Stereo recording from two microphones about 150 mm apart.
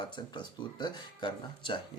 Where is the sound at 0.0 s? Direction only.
30° left (ahead or behind).